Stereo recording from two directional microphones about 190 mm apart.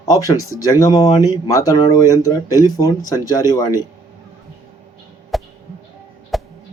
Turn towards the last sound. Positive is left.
turn(degrees=0)  # may be behind; listen again after turning